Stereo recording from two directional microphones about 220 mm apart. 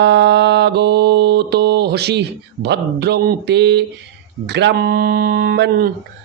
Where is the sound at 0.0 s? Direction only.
50° right (ahead or behind).